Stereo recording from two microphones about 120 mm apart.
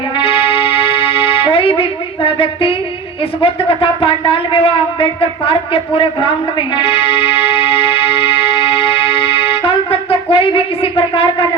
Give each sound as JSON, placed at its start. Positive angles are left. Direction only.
{"t": 0.2, "sound": "music", "side_deg": 50}
{"t": 3.4, "sound": "speech", "side_deg": 50}